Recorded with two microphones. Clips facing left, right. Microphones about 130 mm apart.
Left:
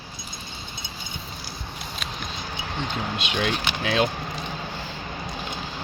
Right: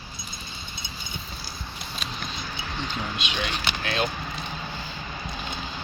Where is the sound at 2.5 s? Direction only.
60° left (ahead or behind).